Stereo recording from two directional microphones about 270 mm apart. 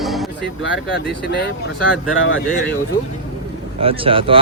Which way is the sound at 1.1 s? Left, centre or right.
Left.